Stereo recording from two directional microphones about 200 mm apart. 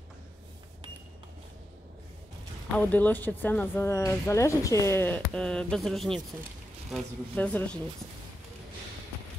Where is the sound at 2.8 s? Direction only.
10° left (ahead or behind).